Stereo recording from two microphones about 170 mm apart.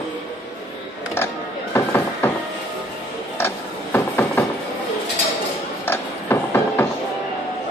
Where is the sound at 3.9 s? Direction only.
15° left (ahead or behind).